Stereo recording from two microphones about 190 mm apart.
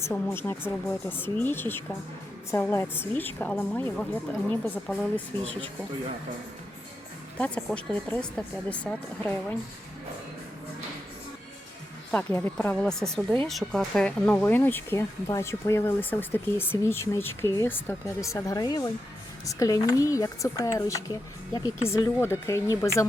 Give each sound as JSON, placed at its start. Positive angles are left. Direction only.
{"t": 0.0, "sound": "speech", "side_deg": 15}
{"t": 7.3, "sound": "speech", "side_deg": 5}
{"t": 12.1, "sound": "speech", "side_deg": 10}